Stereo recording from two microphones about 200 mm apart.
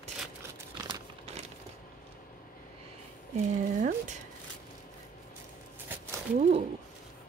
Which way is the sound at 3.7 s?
40° right (ahead or behind).